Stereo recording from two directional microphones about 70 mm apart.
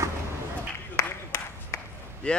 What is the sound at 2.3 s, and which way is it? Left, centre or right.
Speech, centre.